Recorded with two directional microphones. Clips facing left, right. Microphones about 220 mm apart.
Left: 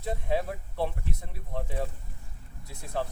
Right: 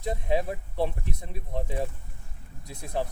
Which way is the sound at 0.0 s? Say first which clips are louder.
Right 2 dB; 15° right (ahead or behind).